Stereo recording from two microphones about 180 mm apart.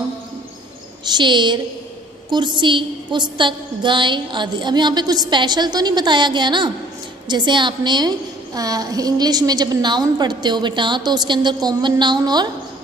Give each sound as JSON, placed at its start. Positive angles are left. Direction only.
{"t": 1.0, "sound": "a woman's voice", "side_deg": -25}